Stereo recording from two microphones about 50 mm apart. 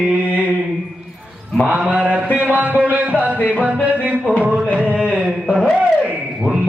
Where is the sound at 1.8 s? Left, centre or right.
Right.